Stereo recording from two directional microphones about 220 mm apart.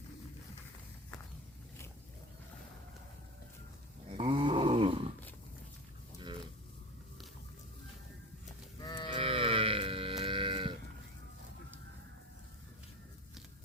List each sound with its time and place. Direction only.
4.2 s grunt: 20° right (ahead or behind)
8.8 s livestock: 20° left (ahead or behind)
9.2 s music: 25° right (ahead or behind)